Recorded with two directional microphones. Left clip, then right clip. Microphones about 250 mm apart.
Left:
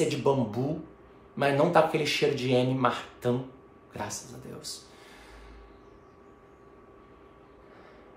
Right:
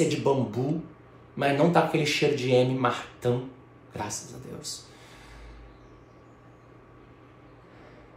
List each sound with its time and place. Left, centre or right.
0.1 s speech: centre